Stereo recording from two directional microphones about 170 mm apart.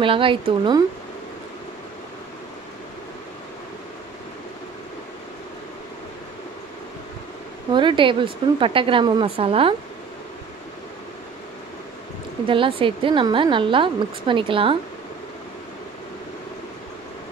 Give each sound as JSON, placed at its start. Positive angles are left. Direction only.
{"t": 0.0, "sound": "speech", "side_deg": -30}
{"t": 7.7, "sound": "speech", "side_deg": -30}
{"t": 12.4, "sound": "a woman's voice", "side_deg": -30}